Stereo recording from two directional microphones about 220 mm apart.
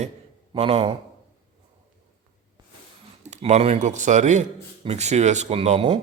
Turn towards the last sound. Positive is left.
turn(degrees=-30)  # may be behind; listen again after turning